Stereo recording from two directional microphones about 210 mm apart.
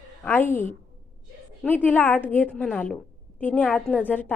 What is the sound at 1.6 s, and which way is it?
A woman's voice, 10° left (ahead or behind).